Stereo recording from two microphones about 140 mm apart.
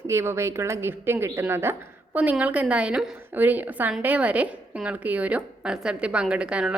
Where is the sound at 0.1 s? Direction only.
20° right (ahead or behind).